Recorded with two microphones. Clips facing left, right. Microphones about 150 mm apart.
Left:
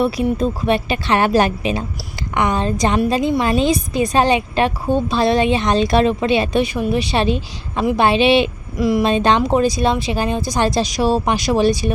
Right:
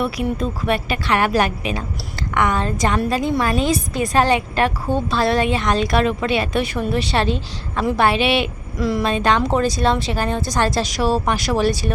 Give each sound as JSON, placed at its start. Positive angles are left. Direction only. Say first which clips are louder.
{"t": 0.0, "sound": "speech", "louder": "left 4 dB", "side_deg": 30}
{"t": 9.5, "sound": "speech", "louder": "left 2 dB", "side_deg": 15}